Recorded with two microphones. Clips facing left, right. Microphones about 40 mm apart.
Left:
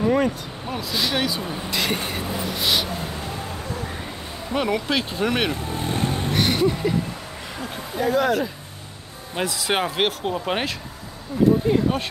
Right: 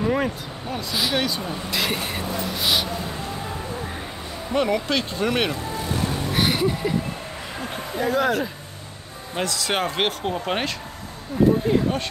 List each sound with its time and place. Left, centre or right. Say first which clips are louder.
0.0 s vehicle: left 3 dB; centre
0.7 s speech: even; centre
4.6 s speech: right 1 dB; centre
5.5 s vehicle: left 1 dB; left
6.3 s speech: left 1 dB; centre
8.0 s speech: left 1 dB; centre
9.3 s speech: left 1 dB; centre
11.3 s speech: right 1 dB; right
11.7 s speech: left 1 dB; centre